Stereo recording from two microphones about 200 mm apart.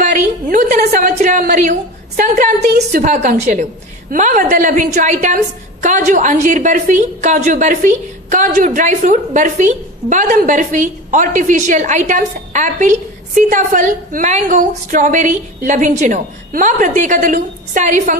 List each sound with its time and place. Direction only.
0.0 s a woman's voice: 40° right (ahead or behind)